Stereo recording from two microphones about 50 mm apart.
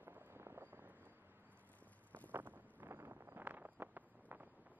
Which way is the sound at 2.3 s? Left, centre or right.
Right.